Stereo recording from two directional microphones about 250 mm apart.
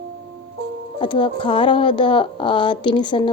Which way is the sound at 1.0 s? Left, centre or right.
Centre.